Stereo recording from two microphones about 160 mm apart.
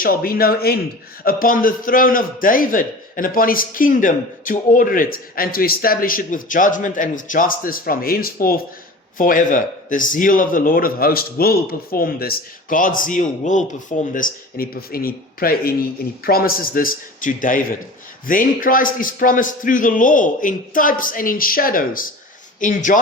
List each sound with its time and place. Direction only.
0.0 s a man's voice: 65° left (ahead or behind)